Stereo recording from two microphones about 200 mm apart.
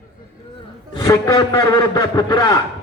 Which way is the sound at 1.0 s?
20° left (ahead or behind).